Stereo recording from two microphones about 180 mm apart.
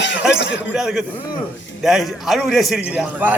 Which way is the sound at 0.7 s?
5° right (ahead or behind).